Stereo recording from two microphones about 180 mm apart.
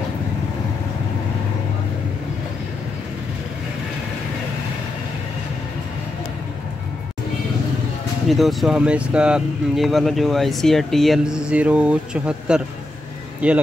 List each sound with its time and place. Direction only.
8.3 s speech: centre (ahead or behind)